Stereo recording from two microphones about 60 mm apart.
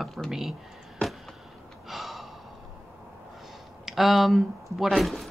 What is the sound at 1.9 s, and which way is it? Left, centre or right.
Gasp, centre.